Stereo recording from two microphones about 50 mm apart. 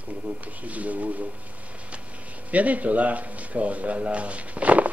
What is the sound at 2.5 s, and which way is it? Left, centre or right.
Speech, right.